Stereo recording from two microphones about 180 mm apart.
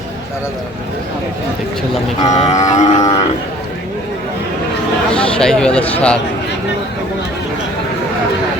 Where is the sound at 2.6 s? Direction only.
40° left (ahead or behind).